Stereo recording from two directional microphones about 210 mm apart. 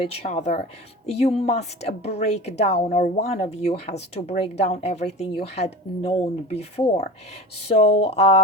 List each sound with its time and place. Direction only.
0.0 s speech: 30° left (ahead or behind)